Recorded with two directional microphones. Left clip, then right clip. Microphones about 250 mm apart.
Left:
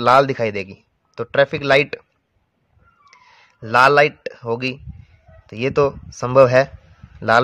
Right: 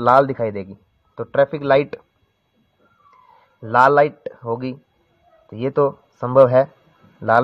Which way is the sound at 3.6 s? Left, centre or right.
Left.